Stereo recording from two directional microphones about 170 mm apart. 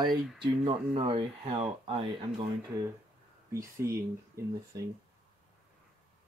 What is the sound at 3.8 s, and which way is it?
Speech, 15° right (ahead or behind).